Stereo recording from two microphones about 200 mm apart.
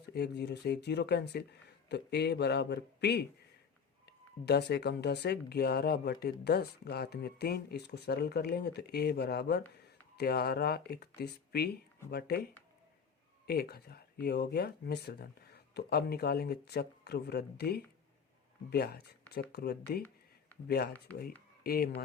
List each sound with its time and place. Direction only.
0.1 s speech: 55° left (ahead or behind)
13.5 s speech: 55° left (ahead or behind)